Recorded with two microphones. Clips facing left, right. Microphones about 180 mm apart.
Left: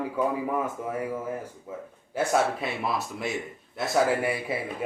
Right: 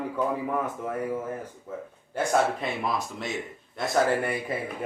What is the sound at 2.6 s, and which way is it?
Speech, 5° left (ahead or behind).